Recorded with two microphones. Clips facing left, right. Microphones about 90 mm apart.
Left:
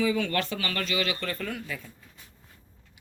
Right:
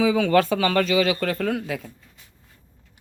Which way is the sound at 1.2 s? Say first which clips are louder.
Right 9 dB; 90° right.